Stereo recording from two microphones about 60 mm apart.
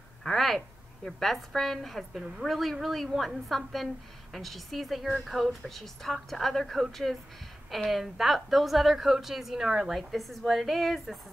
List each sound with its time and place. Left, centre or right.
0.2 s a woman's voice: centre